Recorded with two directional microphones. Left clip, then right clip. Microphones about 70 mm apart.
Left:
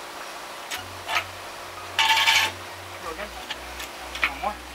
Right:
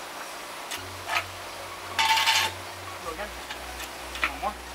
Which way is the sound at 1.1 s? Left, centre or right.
Centre.